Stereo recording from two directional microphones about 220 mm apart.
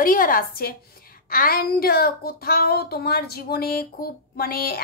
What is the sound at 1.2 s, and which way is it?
Child singing, 40° left (ahead or behind).